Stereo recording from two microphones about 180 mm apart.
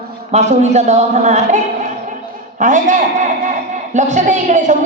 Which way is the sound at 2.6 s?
45° right (ahead or behind).